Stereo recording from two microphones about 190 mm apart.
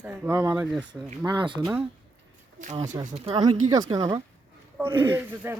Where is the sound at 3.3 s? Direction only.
20° right (ahead or behind).